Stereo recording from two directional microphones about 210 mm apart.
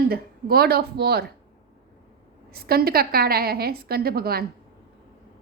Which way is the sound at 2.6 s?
45° right (ahead or behind).